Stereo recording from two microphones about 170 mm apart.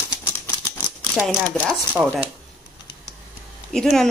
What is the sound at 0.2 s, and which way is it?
Typewriter, 20° left (ahead or behind).